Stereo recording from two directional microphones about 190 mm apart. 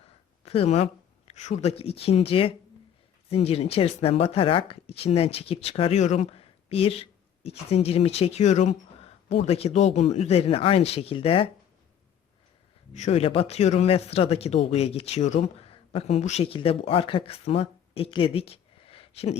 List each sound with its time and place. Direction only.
0.0 s speech: 30° left (ahead or behind)
12.9 s speech: 35° left (ahead or behind)